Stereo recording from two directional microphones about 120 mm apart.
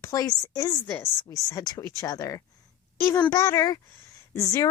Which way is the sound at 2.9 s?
20° left (ahead or behind).